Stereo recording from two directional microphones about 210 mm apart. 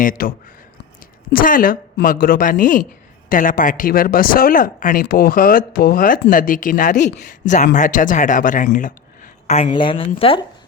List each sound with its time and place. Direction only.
0.0 s speech: 40° left (ahead or behind); by 10.4 s 25° left (ahead or behind)